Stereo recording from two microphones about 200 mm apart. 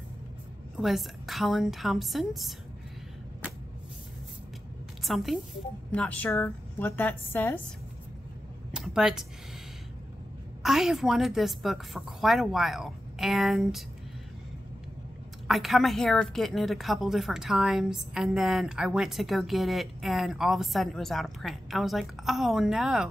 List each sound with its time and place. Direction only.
0.7 s a woman's voice: centre (ahead or behind)
5.0 s a woman's voice: centre (ahead or behind)
8.7 s speech: centre (ahead or behind)
10.6 s a woman's voice: centre (ahead or behind)
15.4 s a woman's voice: centre (ahead or behind)